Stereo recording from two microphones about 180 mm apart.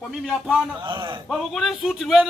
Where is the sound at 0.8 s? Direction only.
25° right (ahead or behind).